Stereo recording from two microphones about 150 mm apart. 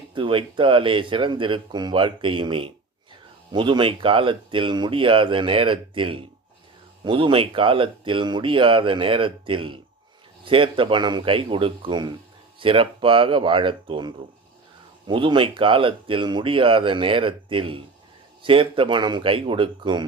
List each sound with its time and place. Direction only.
0.1 s speech: 35° right (ahead or behind)